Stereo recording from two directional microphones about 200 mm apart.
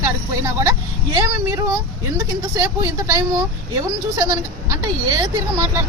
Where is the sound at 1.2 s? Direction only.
15° right (ahead or behind).